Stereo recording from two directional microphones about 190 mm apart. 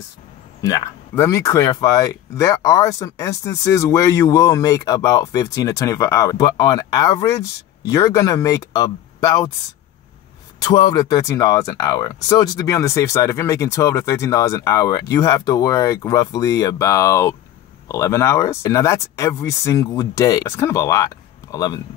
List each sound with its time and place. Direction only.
0.6 s speech: 15° left (ahead or behind)
10.6 s speech: 20° left (ahead or behind)